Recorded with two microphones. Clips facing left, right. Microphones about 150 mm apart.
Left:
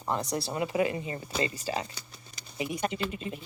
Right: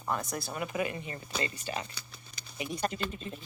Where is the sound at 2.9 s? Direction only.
10° left (ahead or behind).